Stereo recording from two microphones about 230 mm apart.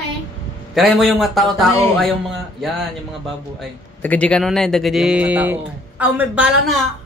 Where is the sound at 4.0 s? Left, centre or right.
Centre.